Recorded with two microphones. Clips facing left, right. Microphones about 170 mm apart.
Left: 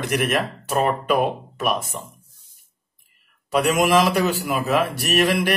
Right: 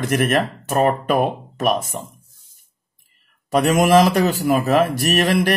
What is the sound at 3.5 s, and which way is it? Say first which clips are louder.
Speech: right 3 dB; 45° right (ahead or behind).